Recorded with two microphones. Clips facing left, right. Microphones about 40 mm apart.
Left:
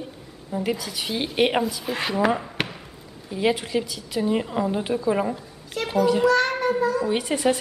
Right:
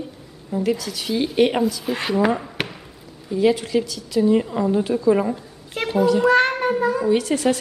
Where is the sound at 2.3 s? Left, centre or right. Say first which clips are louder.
Right 1 dB; centre.